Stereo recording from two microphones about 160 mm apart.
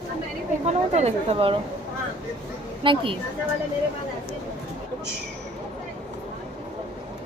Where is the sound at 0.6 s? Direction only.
40° right (ahead or behind).